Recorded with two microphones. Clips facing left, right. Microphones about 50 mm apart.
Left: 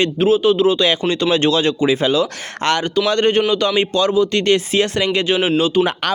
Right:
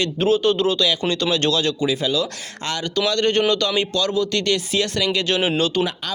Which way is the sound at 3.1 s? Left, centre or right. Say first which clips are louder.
Left 5 dB; left.